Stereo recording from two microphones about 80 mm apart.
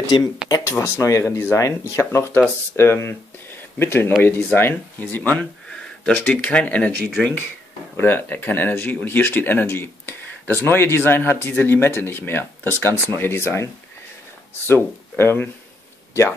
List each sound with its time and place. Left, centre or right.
0.1 s speech: left
0.5 s speech: left; by 6.9 s centre
8.0 s speech: left
14.7 s speech: left